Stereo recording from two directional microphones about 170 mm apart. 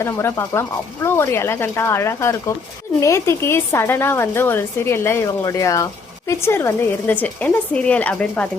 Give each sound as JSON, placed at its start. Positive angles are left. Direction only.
{"t": 0.0, "sound": "a woman's voice", "side_deg": 15}